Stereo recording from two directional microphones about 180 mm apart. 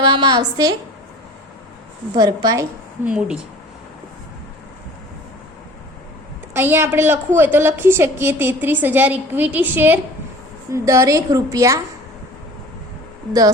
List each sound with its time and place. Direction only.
0.0 s a woman's voice: 25° right (ahead or behind)
2.1 s a woman's voice: 20° right (ahead or behind)
3.0 s speech: 5° right (ahead or behind)
6.5 s a woman's voice: 10° right (ahead or behind)